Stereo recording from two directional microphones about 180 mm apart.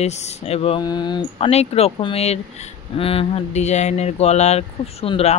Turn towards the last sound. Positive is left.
turn(degrees=35)  # may be behind; listen again after turning